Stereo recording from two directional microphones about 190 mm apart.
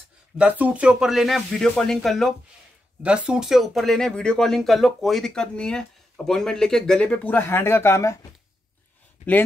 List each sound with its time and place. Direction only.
0.4 s speech: 5° right (ahead or behind); by 8.3 s 15° left (ahead or behind)
9.2 s speech: 35° left (ahead or behind)